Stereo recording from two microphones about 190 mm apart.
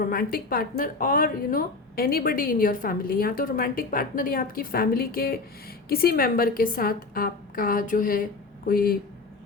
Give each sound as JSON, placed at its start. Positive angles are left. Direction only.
{"t": 0.0, "sound": "speech", "side_deg": 50}